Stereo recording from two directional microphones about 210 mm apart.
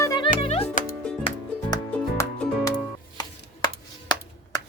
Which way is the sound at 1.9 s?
5° left (ahead or behind).